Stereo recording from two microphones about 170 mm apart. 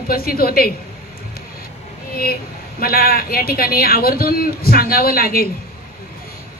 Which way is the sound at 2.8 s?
60° left (ahead or behind).